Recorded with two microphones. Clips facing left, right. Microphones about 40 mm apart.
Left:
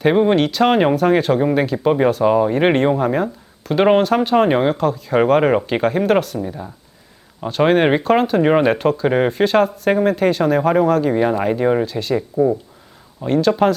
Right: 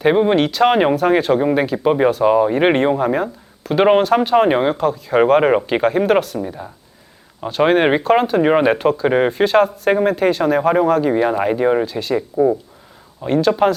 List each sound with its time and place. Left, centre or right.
0.0 s speech: centre